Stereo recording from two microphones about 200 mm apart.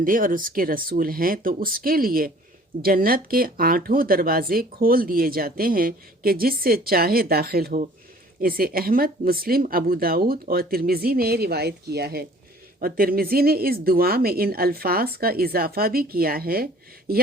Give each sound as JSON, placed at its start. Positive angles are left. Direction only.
{"t": 0.0, "sound": "speech", "side_deg": -45}